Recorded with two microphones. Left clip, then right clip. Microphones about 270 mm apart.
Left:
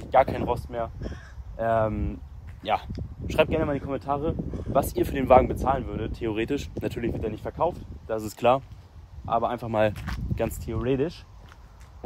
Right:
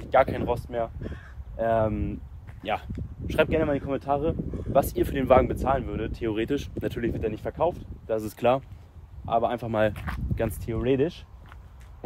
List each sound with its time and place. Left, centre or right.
0.0 s speech: centre
4.5 s speech: left
4.9 s speech: centre